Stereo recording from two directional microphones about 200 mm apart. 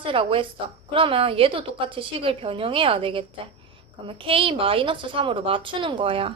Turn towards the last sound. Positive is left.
turn(degrees=-25)  # may be behind; listen again after turning